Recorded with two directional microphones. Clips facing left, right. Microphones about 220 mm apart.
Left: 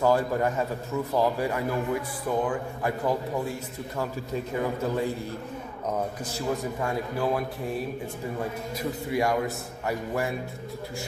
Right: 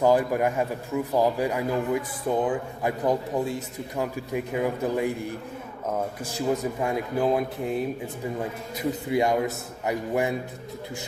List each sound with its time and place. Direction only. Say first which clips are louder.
0.0 s a man's voice: right 2 dB; 15° right (ahead or behind)
6.8 s a man's voice: right 3 dB; 20° right (ahead or behind)
9.0 s a man's voice: right 2 dB; 20° right (ahead or behind)